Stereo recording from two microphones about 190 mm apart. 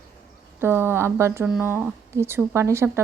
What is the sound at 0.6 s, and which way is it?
A woman's voice, 10° right (ahead or behind).